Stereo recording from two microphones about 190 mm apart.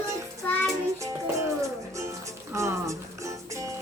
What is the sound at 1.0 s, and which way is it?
Music, 15° right (ahead or behind).